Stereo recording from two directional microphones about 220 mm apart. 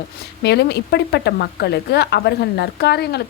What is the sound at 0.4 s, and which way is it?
A woman's voice, 50° left (ahead or behind).